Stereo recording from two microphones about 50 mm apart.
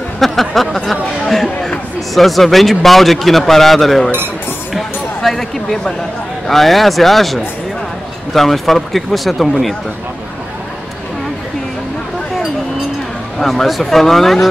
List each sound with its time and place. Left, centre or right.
0.2 s a man's voice: centre
0.8 s chatter: centre
2.1 s a man's voice: centre
4.7 s a sound: centre
6.4 s a man's voice: centre
13.4 s a man's voice: centre